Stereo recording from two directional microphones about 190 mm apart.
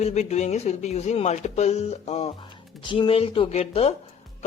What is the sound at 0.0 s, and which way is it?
Speech, 35° left (ahead or behind).